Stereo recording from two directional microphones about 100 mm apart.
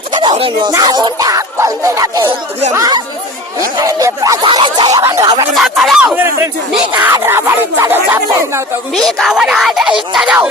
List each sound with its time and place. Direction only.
0.1 s a sound: 50° right (ahead or behind)
0.3 s speech: 65° right (ahead or behind)
0.7 s music: 40° right (ahead or behind)
4.4 s a sound: 55° right (ahead or behind)
4.9 s speech: 35° right (ahead or behind)
5.5 s speech: centre (ahead or behind)
6.1 s speech: 25° right (ahead or behind)
9.0 s speech: 5° left (ahead or behind)